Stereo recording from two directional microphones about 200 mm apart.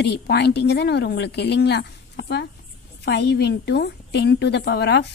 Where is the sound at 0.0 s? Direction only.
55° left (ahead or behind).